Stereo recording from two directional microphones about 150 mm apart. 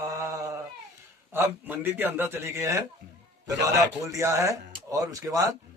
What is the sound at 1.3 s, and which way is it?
A man's voice, 15° right (ahead or behind).